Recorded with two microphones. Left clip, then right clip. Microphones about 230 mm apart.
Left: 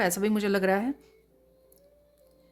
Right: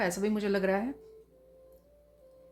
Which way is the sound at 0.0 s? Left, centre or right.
Left.